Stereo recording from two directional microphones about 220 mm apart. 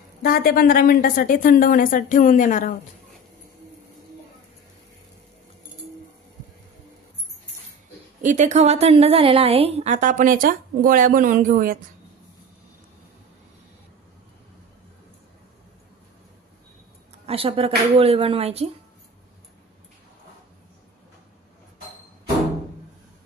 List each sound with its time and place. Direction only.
0.2 s a woman's voice: 40° left (ahead or behind)
8.2 s a woman's voice: 35° right (ahead or behind)
17.3 s a woman's voice: 25° right (ahead or behind)